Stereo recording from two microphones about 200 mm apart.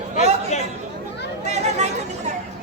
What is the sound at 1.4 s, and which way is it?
Chatter, 35° right (ahead or behind).